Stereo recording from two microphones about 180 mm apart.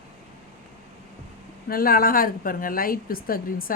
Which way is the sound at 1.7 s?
55° left (ahead or behind).